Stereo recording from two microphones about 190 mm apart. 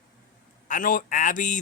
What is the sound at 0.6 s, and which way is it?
Speech, 45° left (ahead or behind).